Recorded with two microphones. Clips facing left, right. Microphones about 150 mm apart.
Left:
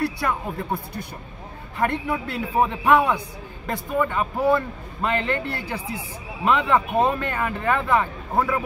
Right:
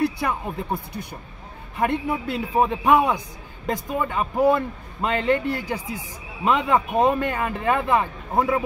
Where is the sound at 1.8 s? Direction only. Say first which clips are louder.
Right 1 dB; 15° right (ahead or behind).